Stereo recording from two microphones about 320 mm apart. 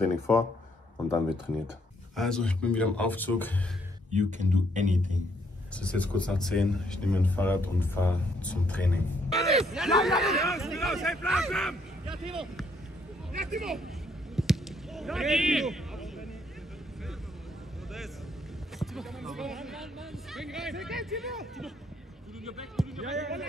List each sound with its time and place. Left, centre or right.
0.9 s speech: centre
4.1 s speech: right
5.8 s speech: centre
14.3 s a sound: centre
18.8 s speech: centre
22.8 s speech: centre